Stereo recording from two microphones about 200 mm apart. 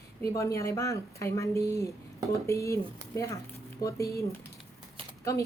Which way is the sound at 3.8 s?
15° left (ahead or behind).